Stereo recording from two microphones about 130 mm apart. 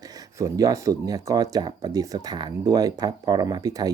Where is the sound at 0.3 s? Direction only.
25° right (ahead or behind).